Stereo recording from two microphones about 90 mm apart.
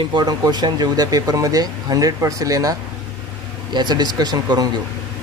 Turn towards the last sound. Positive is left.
turn(degrees=-50)  # may be behind; listen again after turning